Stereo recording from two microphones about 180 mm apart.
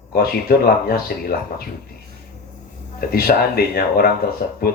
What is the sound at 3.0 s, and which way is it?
Speech, 55° left (ahead or behind).